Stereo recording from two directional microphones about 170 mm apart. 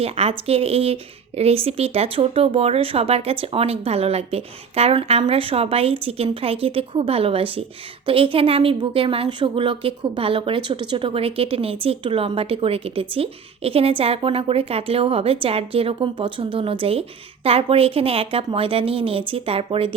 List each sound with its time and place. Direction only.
0.0 s a woman's voice: 35° right (ahead or behind)